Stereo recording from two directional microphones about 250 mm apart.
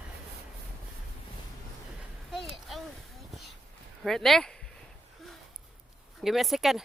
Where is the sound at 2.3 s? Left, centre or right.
Centre.